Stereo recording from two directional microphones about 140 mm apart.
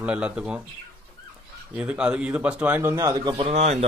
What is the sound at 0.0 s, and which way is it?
Speech, 10° right (ahead or behind).